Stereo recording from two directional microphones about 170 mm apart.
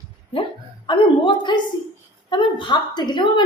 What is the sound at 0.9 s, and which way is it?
A woman's voice, 25° left (ahead or behind).